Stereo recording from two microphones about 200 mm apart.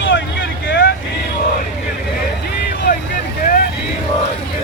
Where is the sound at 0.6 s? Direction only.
60° left (ahead or behind).